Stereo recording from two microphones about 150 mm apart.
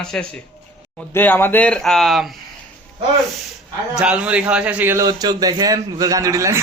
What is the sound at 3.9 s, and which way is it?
A man's voice, 5° right (ahead or behind).